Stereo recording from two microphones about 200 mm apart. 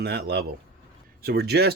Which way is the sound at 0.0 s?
55° right (ahead or behind).